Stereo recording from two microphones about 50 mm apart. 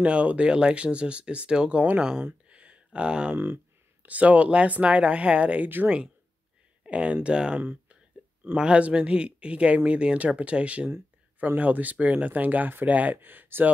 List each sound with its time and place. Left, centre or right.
0.0 s speech: right
2.5 s a sound: right
4.0 s speech: right
6.8 s speech: right